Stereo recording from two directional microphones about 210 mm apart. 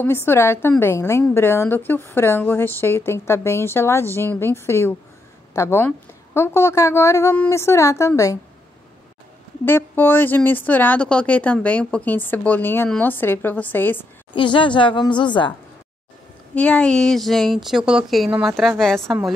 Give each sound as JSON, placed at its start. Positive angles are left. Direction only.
{"t": 0.0, "sound": "a woman's voice", "side_deg": 10}
{"t": 9.7, "sound": "a woman's voice", "side_deg": 10}
{"t": 14.3, "sound": "a woman's voice", "side_deg": 25}
{"t": 16.5, "sound": "speech", "side_deg": 5}